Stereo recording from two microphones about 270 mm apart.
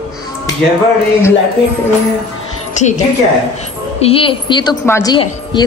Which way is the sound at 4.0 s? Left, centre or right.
Left.